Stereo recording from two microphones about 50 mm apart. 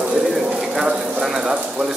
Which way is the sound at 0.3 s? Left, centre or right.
Centre.